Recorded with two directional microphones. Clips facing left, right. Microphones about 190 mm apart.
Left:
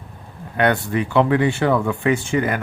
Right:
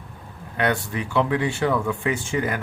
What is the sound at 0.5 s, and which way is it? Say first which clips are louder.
Speech: left 5 dB; 60° left (ahead or behind).